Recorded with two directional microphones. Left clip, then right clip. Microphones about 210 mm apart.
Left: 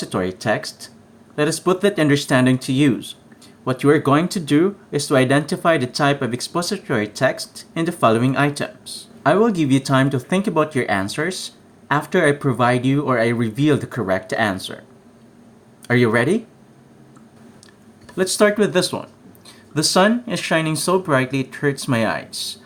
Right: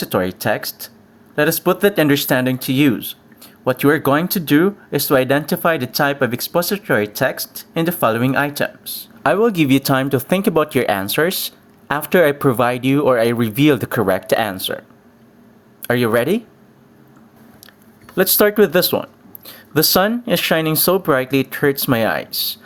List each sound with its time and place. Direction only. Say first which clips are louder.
0.0 s speech: right 4 dB; 35° right (ahead or behind)
15.8 s speech: right 1 dB; 40° right (ahead or behind)
18.2 s speech: right 3 dB; 35° right (ahead or behind)